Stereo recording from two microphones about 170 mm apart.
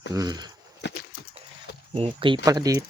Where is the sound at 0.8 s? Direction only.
90° left.